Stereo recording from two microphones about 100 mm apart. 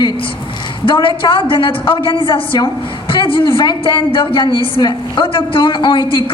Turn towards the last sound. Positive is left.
turn(degrees=50)  # may be behind; listen again after turning